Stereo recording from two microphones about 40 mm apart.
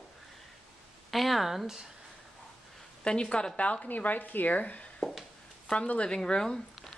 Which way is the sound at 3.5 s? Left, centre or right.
Left.